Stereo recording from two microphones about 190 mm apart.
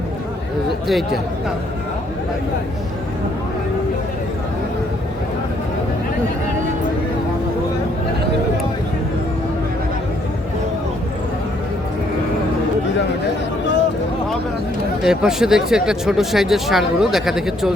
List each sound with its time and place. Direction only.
15.0 s speech: 5° right (ahead or behind)